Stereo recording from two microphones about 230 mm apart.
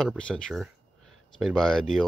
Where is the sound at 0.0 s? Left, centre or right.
Centre.